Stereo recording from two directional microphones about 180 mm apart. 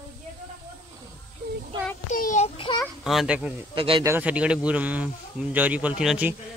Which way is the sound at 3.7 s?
30° right (ahead or behind).